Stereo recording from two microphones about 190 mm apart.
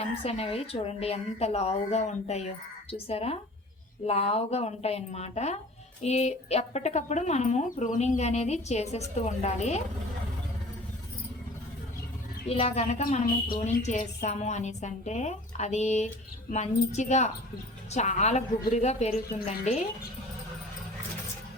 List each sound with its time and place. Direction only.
0.0 s speech: 30° left (ahead or behind)
12.5 s speech: 35° left (ahead or behind)